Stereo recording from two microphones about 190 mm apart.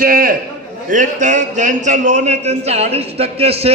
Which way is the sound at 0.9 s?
40° right (ahead or behind).